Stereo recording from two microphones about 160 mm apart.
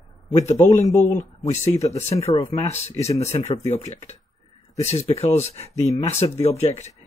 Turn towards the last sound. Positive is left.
turn(degrees=45)  # may be behind; listen again after turning